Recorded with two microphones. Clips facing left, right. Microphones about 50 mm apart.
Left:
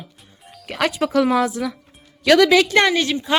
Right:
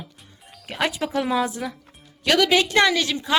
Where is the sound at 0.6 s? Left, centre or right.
Left.